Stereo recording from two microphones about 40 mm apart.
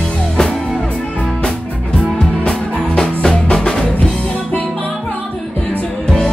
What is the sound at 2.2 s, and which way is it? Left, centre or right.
Music, left.